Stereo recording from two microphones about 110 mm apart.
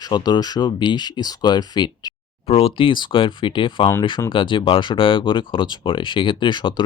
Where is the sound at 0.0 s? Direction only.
40° left (ahead or behind).